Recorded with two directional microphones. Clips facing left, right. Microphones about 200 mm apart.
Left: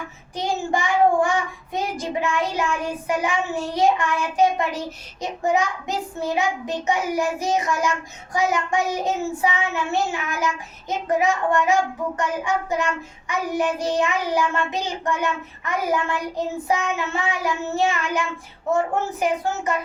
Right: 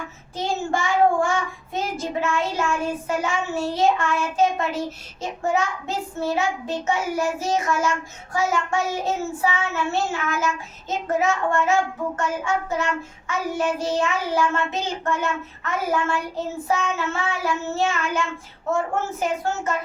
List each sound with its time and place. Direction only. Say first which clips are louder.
0.3 s child singing: left 1 dB; 15° left (ahead or behind)
19.2 s child singing: left 3 dB; 15° left (ahead or behind)